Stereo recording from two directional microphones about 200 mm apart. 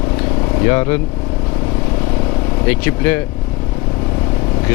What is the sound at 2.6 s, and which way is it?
Speech, 10° left (ahead or behind).